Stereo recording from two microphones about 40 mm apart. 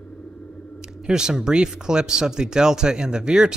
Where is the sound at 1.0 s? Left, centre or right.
Centre.